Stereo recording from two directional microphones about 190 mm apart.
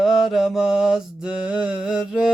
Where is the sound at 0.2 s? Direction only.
Centre (ahead or behind).